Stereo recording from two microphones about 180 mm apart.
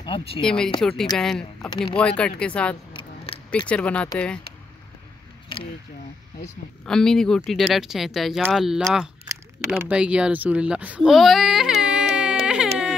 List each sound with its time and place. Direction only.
0.0 s speech: 30° left (ahead or behind)
0.4 s speech: 5° left (ahead or behind)
3.0 s scissors: 25° left (ahead or behind)
3.5 s speech: 5° left (ahead or behind)
6.9 s speech: 5° left (ahead or behind)
9.8 s baby cry: 5° right (ahead or behind)